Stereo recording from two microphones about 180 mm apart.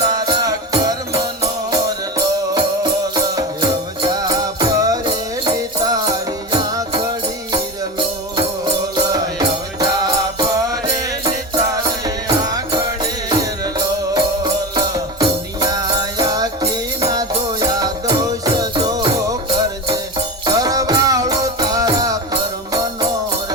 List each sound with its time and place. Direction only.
0.3 s music: 20° right (ahead or behind)
11.8 s music: 20° right (ahead or behind)